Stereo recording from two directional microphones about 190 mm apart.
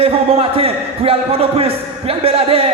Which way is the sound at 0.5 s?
30° right (ahead or behind).